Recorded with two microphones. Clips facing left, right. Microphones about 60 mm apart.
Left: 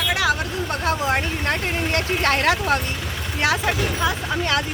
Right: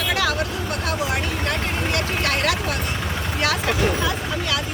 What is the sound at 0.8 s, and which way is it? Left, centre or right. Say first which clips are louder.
Vehicle: left 4 dB; left.